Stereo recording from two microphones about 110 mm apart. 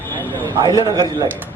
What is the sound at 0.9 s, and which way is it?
Speech, 40° right (ahead or behind).